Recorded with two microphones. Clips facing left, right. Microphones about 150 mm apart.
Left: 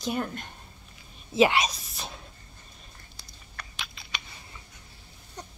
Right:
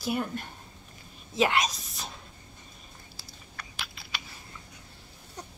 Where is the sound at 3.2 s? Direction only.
5° right (ahead or behind).